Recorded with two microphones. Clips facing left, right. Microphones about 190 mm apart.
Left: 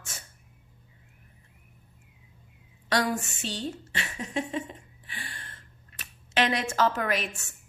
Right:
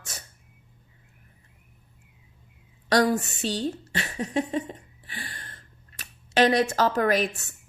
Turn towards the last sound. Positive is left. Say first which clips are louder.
# right 7 dB
turn(degrees=-35)  # may be behind; listen again after turning